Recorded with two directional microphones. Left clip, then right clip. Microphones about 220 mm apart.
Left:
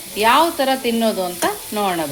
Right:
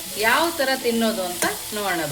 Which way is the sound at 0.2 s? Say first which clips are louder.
Left 5 dB; 30° left (ahead or behind).